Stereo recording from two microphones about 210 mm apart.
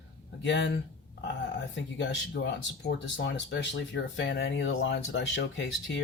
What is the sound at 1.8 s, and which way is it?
Speech, 60° left (ahead or behind).